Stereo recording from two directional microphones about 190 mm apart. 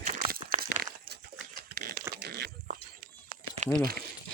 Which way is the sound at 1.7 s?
55° right (ahead or behind).